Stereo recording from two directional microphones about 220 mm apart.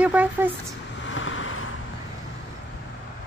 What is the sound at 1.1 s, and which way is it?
Vehicle, 65° left (ahead or behind).